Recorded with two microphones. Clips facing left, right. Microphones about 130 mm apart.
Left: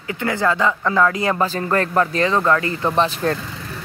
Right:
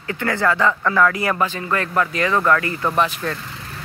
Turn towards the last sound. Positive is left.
turn(degrees=35)  # may be behind; listen again after turning